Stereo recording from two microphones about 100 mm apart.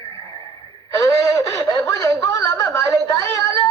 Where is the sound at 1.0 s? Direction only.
35° left (ahead or behind).